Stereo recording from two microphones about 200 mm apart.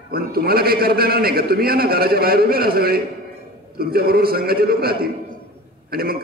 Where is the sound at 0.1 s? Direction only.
50° right (ahead or behind).